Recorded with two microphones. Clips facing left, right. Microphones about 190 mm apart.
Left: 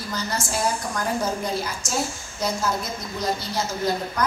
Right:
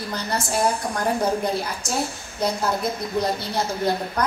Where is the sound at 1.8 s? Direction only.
60° right (ahead or behind).